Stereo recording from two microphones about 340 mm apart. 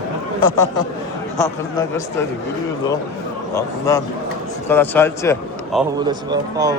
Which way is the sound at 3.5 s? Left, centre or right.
Centre.